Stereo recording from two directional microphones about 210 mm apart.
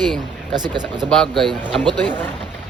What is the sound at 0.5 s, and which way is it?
Speech, 20° right (ahead or behind).